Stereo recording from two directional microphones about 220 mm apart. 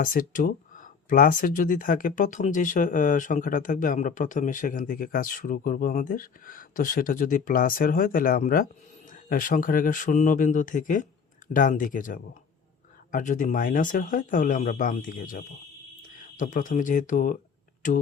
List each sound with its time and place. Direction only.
0.0 s speech: 40° left (ahead or behind)